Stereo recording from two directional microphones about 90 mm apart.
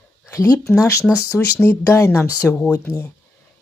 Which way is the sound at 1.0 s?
5° left (ahead or behind).